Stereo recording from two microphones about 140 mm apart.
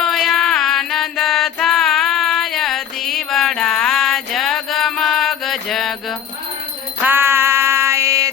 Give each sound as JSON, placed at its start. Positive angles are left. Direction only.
{"t": 0.0, "sound": "music", "side_deg": 0}
{"t": 7.0, "sound": "synthetic singing", "side_deg": -15}